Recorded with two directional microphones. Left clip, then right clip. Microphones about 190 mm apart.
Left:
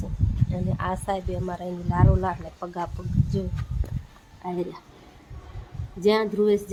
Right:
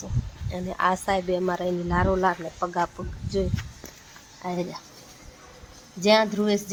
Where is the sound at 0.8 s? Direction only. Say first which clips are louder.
Right 6 dB; 35° right (ahead or behind).